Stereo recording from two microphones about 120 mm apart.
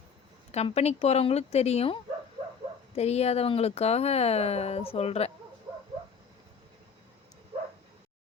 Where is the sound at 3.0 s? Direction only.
60° left (ahead or behind).